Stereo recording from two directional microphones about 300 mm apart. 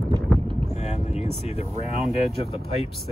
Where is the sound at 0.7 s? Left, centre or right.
Left.